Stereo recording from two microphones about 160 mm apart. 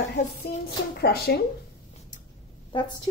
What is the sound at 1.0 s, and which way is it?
Speech, 80° left.